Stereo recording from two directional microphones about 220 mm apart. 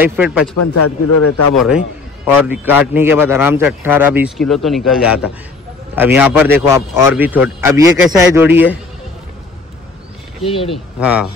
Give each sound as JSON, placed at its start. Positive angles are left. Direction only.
{"t": 0.0, "sound": "a man's voice", "side_deg": -10}
{"t": 0.8, "sound": "a man's voice", "side_deg": 90}
{"t": 1.5, "sound": "a man's voice", "side_deg": 0}
{"t": 10.4, "sound": "speech", "side_deg": 25}
{"t": 10.7, "sound": "speech", "side_deg": -5}